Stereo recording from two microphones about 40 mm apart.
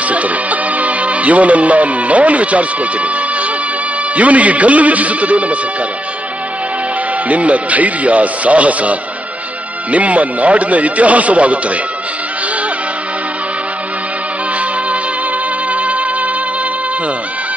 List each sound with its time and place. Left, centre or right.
0.0 s music: right
4.1 s speech: right
7.2 s speech: right
15.7 s music: right